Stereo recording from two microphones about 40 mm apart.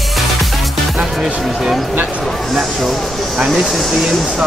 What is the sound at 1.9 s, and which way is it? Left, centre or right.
Music, right.